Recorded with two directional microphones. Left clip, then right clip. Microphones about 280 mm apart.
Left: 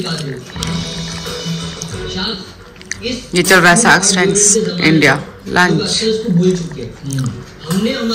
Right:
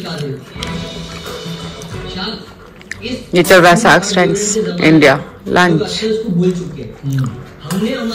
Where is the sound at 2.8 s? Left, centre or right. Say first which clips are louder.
Left 1 dB; centre.